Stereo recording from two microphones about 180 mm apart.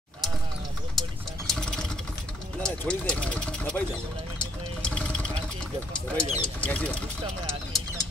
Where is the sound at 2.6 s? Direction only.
5° left (ahead or behind).